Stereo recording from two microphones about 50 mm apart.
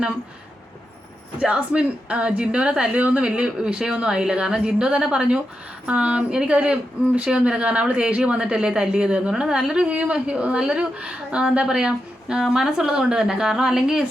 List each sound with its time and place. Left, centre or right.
1.4 s a woman's voice: right